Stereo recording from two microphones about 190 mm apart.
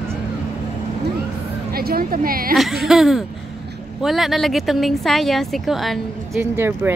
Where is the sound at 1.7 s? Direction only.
50° right (ahead or behind).